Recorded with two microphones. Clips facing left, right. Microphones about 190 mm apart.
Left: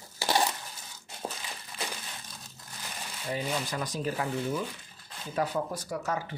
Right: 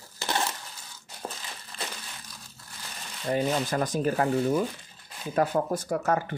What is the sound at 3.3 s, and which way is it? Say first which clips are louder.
Speech: right 6 dB; 50° right (ahead or behind).